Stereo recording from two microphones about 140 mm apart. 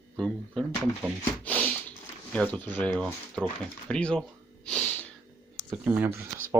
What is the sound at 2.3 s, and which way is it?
Speech, 10° left (ahead or behind).